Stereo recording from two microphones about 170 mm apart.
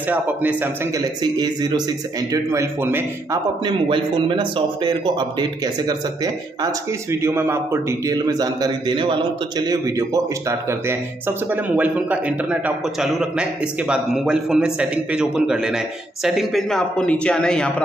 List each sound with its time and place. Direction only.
0.1 s speech: 10° right (ahead or behind)
1.2 s speech: 25° right (ahead or behind)
2.5 s speech: 15° right (ahead or behind)
3.6 s speech: 30° right (ahead or behind); by 17.8 s 5° left (ahead or behind)